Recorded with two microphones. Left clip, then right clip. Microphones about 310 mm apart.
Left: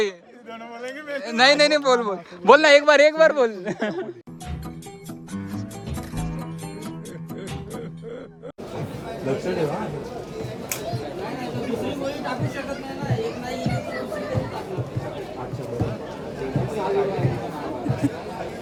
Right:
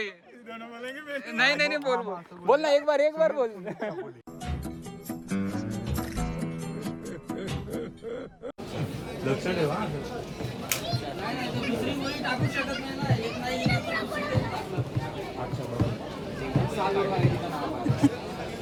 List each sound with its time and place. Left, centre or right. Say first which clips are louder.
0.9 s a man's voice: left 6 dB; centre; by 4.0 s left
6.1 s music: left 2 dB; centre
9.0 s speech: left 3 dB; centre
10.8 s chatter: left 3 dB; centre
16.4 s a sound: left 2 dB; centre